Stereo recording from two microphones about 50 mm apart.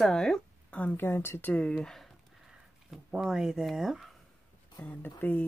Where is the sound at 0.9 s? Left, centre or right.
Left.